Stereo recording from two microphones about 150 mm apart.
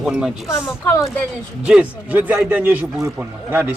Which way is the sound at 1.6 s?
10° right (ahead or behind).